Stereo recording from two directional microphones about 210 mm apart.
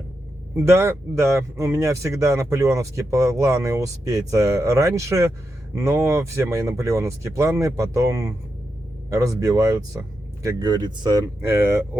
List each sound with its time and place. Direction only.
0.5 s speech: 10° right (ahead or behind)